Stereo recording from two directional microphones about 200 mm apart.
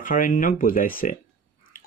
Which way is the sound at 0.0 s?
40° left (ahead or behind).